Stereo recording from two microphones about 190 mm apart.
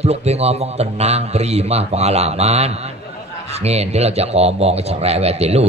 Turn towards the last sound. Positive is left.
turn(degrees=-35)  # may be behind; listen again after turning